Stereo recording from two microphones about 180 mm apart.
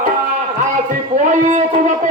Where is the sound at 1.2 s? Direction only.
45° right (ahead or behind).